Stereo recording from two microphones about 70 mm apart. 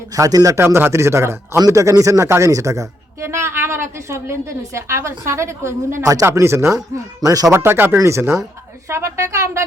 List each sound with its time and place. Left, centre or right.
0.2 s speech: right
0.5 s a woman's voice: right
7.2 s speech: right
7.5 s a woman's voice: right
7.9 s a woman's voice: right